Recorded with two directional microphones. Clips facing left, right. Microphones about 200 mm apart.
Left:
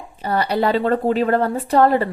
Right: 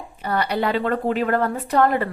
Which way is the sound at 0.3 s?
30° left (ahead or behind).